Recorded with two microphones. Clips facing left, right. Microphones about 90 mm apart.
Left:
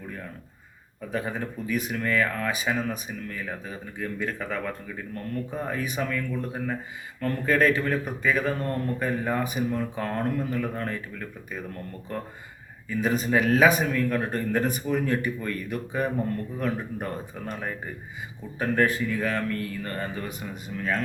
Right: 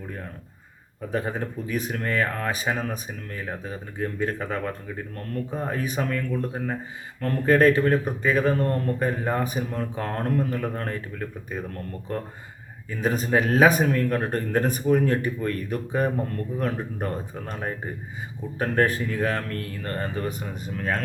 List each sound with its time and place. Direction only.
1.1 s speech: 35° right (ahead or behind)
12.9 s speech: 40° right (ahead or behind)